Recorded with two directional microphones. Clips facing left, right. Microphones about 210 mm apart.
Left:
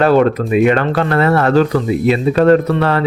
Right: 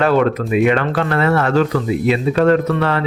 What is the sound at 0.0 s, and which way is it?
Speech, 35° left (ahead or behind).